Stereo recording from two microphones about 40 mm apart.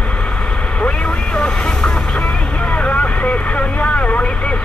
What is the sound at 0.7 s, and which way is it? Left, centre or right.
Vehicle, left.